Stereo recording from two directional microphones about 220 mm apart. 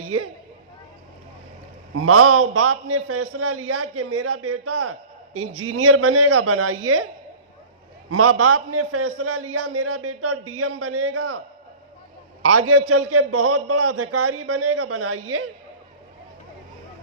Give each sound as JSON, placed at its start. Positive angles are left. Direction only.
{"t": 2.0, "sound": "a man's voice", "side_deg": -85}
{"t": 8.1, "sound": "a man's voice", "side_deg": -90}
{"t": 12.4, "sound": "a man's voice", "side_deg": -85}